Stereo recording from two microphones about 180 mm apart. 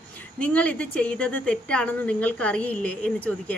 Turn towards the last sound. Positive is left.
turn(degrees=10)  # may be behind; listen again after turning